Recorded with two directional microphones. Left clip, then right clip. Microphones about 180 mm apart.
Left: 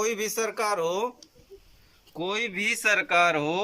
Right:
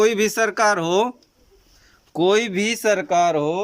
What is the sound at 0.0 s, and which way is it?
Speech, 55° right (ahead or behind).